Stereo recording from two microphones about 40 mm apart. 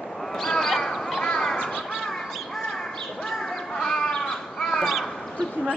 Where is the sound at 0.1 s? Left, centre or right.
Centre.